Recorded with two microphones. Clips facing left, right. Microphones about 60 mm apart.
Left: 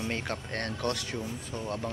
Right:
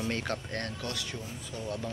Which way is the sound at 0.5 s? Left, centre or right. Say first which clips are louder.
Left 4 dB; left.